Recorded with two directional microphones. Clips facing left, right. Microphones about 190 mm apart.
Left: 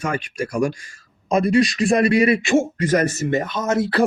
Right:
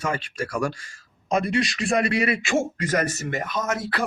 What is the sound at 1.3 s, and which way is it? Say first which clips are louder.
Speech: left 6 dB; 40° left (ahead or behind).